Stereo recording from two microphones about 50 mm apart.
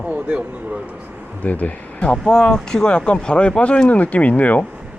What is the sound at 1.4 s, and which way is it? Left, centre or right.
Speech, left.